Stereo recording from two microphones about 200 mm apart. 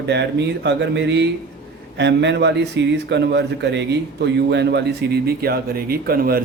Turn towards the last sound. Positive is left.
turn(degrees=-50)  # may be behind; listen again after turning